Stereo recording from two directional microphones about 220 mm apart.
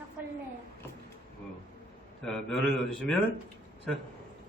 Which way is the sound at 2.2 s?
Centre (ahead or behind).